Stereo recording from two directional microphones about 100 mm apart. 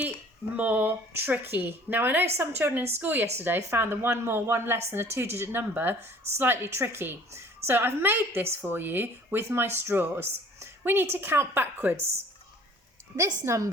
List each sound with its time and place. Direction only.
0.5 s a woman's voice: 15° right (ahead or behind)
13.1 s a woman's voice: 30° right (ahead or behind)